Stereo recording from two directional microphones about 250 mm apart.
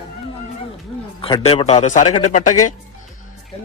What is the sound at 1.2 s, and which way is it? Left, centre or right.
A man's voice, left.